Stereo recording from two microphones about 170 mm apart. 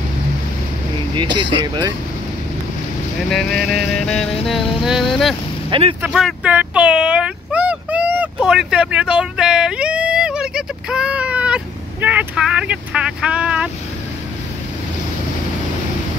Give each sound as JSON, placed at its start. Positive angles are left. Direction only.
{"t": 1.1, "sound": "speech", "side_deg": -25}
{"t": 3.3, "sound": "music", "side_deg": 0}
{"t": 5.7, "sound": "speech", "side_deg": -30}
{"t": 6.0, "sound": "a sound", "side_deg": -5}